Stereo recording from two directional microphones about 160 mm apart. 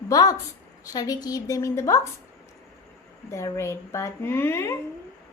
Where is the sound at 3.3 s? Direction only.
15° left (ahead or behind).